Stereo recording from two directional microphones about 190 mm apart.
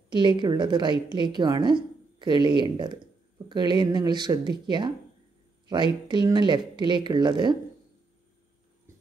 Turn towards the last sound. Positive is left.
turn(degrees=-25)  # may be behind; listen again after turning